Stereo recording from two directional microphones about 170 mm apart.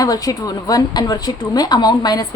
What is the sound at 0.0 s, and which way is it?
A woman's voice, 20° left (ahead or behind).